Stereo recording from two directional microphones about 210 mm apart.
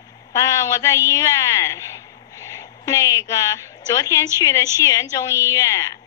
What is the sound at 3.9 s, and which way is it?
Speech, 15° left (ahead or behind).